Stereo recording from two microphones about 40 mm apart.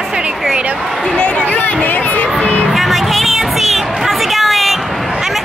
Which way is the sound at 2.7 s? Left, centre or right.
Centre.